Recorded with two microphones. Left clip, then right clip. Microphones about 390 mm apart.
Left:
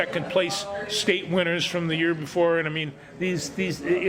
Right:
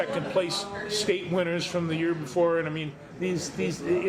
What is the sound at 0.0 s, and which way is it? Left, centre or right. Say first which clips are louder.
A man's voice: left 3 dB; left.